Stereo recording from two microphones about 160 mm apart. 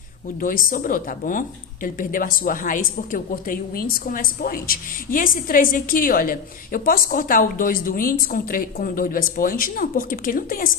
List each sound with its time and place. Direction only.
0.4 s speech: 60° left (ahead or behind)